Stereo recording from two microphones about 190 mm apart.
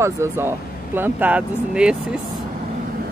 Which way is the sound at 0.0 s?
15° right (ahead or behind).